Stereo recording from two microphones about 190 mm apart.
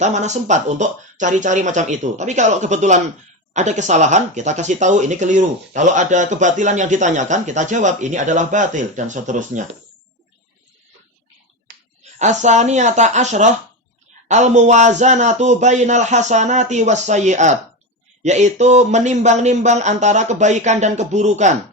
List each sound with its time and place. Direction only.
0.0 s speech: 40° right (ahead or behind)
11.7 s a sound: 50° right (ahead or behind)
12.2 s speech: 40° right (ahead or behind)